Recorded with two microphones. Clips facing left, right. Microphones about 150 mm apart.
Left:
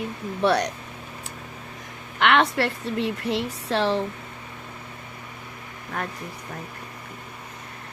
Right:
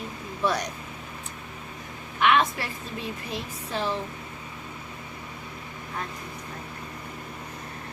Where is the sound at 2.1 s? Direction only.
70° left (ahead or behind).